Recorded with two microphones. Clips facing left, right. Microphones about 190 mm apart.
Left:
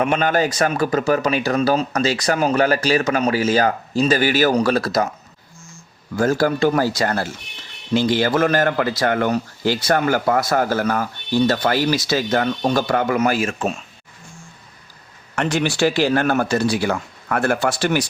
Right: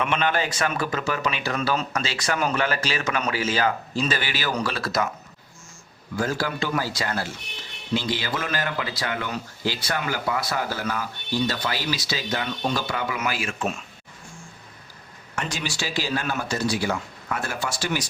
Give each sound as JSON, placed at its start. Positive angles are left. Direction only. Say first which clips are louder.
{"t": 0.0, "sound": "a man's voice", "louder": "left 6 dB", "side_deg": 40}
{"t": 6.1, "sound": "a man's voice", "louder": "left 8 dB", "side_deg": 45}
{"t": 15.4, "sound": "speech", "louder": "left 11 dB", "side_deg": 60}